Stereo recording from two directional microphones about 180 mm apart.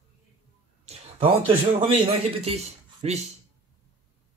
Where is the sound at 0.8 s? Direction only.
35° right (ahead or behind).